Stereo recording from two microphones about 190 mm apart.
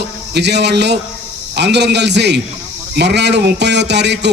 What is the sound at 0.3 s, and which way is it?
A man's voice, 65° right (ahead or behind).